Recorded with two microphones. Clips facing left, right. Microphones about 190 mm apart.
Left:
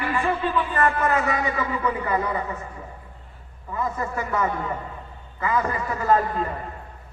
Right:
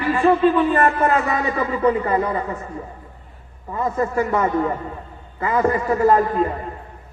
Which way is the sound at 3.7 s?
30° right (ahead or behind).